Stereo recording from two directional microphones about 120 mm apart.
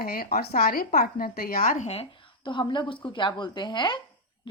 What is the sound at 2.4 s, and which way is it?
A woman's voice, 40° left (ahead or behind).